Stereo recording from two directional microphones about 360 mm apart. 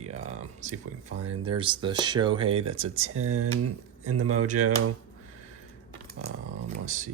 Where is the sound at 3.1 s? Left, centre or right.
Right.